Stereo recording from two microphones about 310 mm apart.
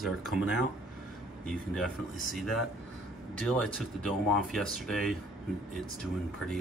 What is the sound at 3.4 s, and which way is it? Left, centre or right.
Speech, centre.